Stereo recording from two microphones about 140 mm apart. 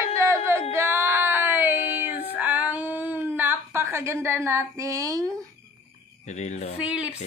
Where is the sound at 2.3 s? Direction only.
10° right (ahead or behind).